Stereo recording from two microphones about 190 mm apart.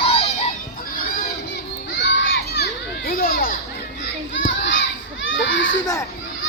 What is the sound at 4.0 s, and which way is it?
Children playing, 70° left (ahead or behind).